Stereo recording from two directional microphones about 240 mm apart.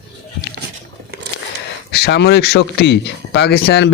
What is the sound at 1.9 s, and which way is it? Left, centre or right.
Speech, left.